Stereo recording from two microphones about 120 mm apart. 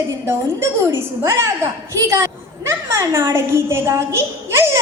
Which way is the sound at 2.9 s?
25° right (ahead or behind).